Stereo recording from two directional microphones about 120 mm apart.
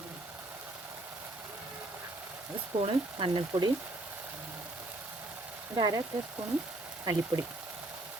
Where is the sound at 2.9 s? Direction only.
45° right (ahead or behind).